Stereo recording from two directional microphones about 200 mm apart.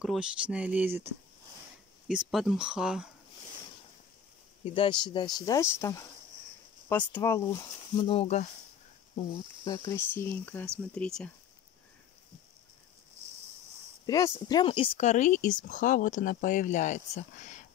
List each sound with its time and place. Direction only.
0.0 s speech: 5° right (ahead or behind)
2.0 s speech: 5° right (ahead or behind)
4.6 s speech: 25° left (ahead or behind)
9.7 s speech: 15° left (ahead or behind)
14.0 s speech: 15° left (ahead or behind); by 17.6 s 40° left (ahead or behind)